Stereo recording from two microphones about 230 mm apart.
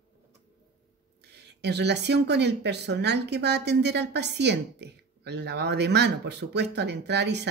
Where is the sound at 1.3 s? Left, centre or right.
Right.